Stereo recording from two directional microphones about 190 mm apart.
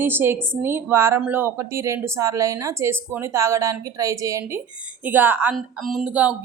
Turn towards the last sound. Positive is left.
turn(degrees=-5)  # may be behind; listen again after turning